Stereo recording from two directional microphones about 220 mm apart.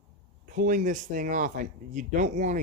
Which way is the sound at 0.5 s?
35° right (ahead or behind).